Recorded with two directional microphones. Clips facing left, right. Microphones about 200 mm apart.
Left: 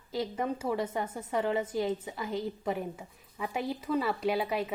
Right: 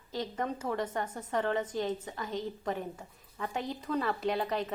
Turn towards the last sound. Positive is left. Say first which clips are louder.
# left 2 dB
turn(degrees=5)  # may be behind; listen again after turning